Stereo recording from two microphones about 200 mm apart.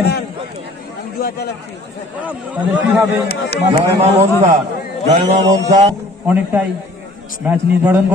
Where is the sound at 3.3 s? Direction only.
55° left (ahead or behind).